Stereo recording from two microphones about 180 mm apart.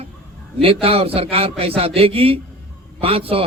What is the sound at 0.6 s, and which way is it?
A man's voice, 30° right (ahead or behind).